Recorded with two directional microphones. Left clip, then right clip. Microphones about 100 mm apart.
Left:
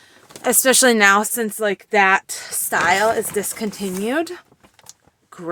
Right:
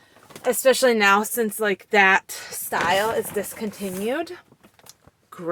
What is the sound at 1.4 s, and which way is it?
Speech, 40° left (ahead or behind).